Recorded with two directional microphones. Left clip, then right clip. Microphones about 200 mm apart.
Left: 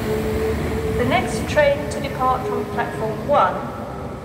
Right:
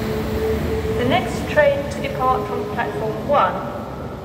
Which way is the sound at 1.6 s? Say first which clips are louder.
Right 1 dB; 20° left (ahead or behind).